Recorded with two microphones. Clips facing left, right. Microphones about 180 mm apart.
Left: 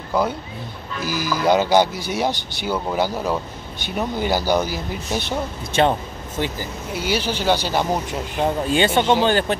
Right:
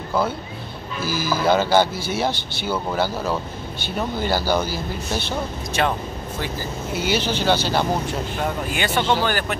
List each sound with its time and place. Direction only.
0.1 s speech: 15° left (ahead or behind)
5.8 s speech: 30° left (ahead or behind)
7.0 s speech: 10° left (ahead or behind)
8.6 s speech: 25° left (ahead or behind)